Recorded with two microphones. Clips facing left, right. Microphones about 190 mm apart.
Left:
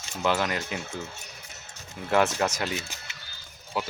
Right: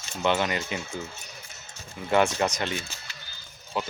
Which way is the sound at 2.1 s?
Centre (ahead or behind).